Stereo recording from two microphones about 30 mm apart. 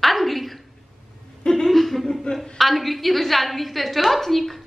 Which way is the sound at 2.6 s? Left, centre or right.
Centre.